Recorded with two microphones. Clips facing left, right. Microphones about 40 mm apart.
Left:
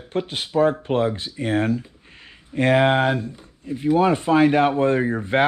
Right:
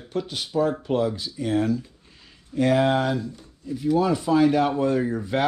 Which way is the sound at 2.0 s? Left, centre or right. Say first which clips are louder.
Left 6 dB; left.